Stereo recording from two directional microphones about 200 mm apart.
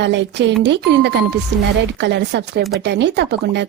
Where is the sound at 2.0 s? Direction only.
60° right (ahead or behind).